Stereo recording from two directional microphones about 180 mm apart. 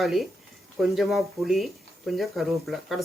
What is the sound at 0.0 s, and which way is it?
Speech, centre (ahead or behind).